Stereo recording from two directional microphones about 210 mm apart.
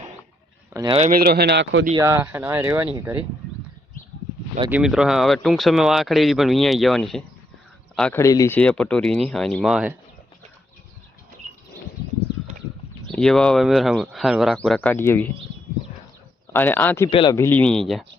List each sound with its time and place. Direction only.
0.7 s speech: 15° right (ahead or behind)
0.9 s speech: 40° right (ahead or behind); by 1.9 s 55° right (ahead or behind)
1.9 s speech: 15° right (ahead or behind)
4.7 s speech: 5° right (ahead or behind)
13.1 s speech: centre (ahead or behind)
16.5 s speech: 10° left (ahead or behind)
17.1 s speech: 25° left (ahead or behind)
17.3 s speech: 10° left (ahead or behind)